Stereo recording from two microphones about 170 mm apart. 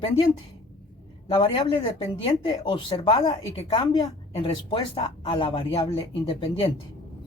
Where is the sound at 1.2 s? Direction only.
30° left (ahead or behind).